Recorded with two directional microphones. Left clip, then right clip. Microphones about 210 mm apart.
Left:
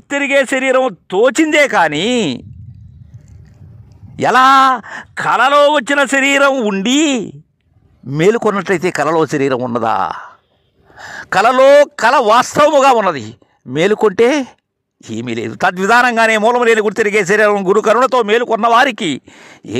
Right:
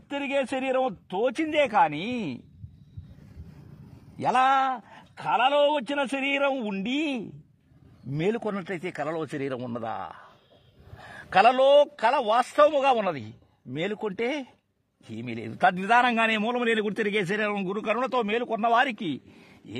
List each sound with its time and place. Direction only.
0.1 s speech: 50° left (ahead or behind)
4.2 s a man's voice: 45° left (ahead or behind)